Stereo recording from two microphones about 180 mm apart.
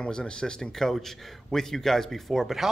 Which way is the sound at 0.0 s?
5° left (ahead or behind).